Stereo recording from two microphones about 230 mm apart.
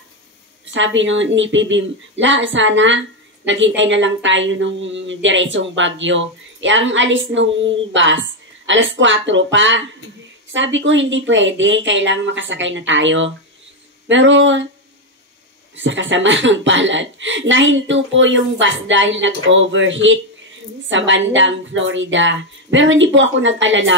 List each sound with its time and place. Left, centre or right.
0.7 s a woman's voice: right
15.7 s a woman's voice: right